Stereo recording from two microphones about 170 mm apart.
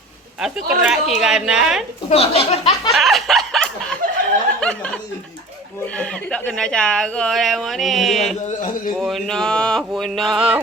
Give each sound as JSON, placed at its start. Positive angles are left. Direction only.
{"t": 0.4, "sound": "speech", "side_deg": -5}
{"t": 2.0, "sound": "a sound", "side_deg": 35}
{"t": 2.9, "sound": "snicker", "side_deg": 0}
{"t": 4.6, "sound": "chuckle", "side_deg": 5}
{"t": 6.0, "sound": "speech", "side_deg": 5}
{"t": 8.4, "sound": "speech", "side_deg": 50}
{"t": 9.0, "sound": "speech", "side_deg": 0}